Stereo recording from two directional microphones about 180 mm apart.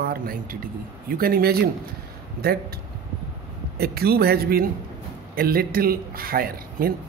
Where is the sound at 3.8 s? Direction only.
60° right (ahead or behind).